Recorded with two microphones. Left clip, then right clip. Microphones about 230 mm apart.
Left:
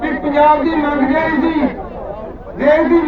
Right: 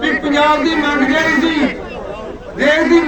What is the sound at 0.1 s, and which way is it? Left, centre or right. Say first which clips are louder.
Chatter: left 2 dB; right.